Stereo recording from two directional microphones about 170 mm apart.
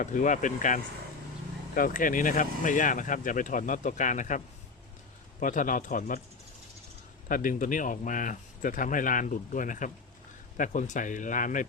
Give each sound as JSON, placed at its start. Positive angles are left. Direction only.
{"t": 0.0, "sound": "speech", "side_deg": 45}
{"t": 7.3, "sound": "speech", "side_deg": 55}